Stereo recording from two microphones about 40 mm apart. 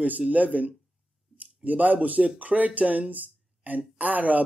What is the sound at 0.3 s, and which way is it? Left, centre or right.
A man's voice, right.